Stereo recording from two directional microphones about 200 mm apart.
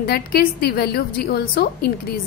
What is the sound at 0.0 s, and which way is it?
A woman's voice, 50° left (ahead or behind).